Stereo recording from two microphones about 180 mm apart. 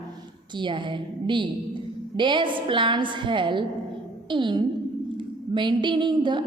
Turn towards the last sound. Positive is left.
turn(degrees=-25)  # may be behind; listen again after turning